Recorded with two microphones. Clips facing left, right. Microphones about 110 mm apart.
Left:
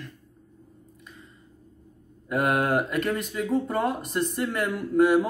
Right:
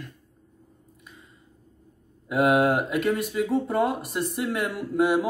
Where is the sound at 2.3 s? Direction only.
5° right (ahead or behind).